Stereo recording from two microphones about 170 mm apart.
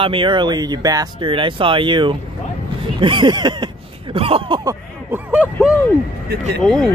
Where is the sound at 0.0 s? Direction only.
30° right (ahead or behind).